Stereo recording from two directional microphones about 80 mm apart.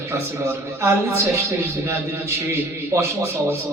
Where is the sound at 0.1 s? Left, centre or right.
Right.